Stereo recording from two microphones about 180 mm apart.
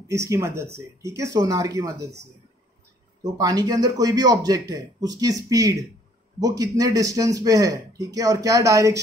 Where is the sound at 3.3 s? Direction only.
20° right (ahead or behind).